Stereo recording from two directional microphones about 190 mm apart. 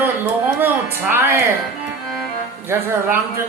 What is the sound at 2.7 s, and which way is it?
Speech, 10° right (ahead or behind).